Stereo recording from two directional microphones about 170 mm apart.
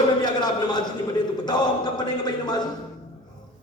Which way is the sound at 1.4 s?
25° left (ahead or behind).